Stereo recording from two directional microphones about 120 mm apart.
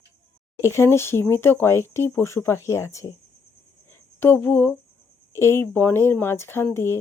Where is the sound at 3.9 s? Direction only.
20° left (ahead or behind).